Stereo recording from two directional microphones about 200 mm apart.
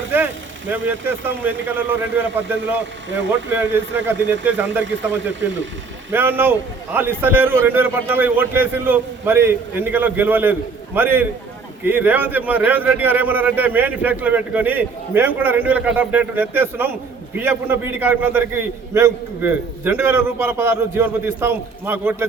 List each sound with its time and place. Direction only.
0.7 s a man's voice: 10° right (ahead or behind)
3.5 s a man's voice: 10° right (ahead or behind)
5.3 s speech: 65° right (ahead or behind)
6.1 s a man's voice: 10° right (ahead or behind)